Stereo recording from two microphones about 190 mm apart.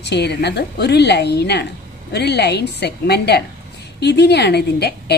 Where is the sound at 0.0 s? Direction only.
60° left (ahead or behind).